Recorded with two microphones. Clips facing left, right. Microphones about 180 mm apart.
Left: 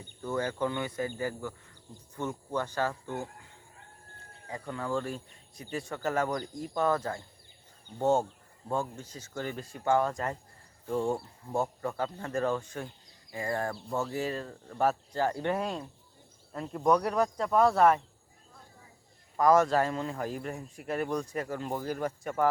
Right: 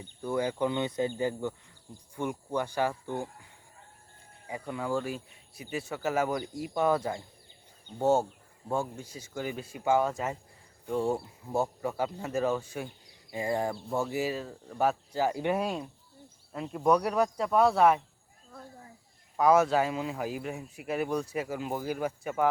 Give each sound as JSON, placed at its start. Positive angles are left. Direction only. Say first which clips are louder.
{"t": 0.2, "sound": "speech", "louder": "right 2 dB", "side_deg": -10}
{"t": 4.4, "sound": "speech", "louder": "right 2 dB", "side_deg": -10}
{"t": 19.4, "sound": "a man's voice", "louder": "even", "side_deg": -5}